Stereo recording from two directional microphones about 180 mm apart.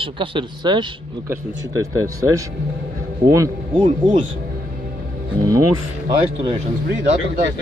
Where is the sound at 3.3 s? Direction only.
15° right (ahead or behind).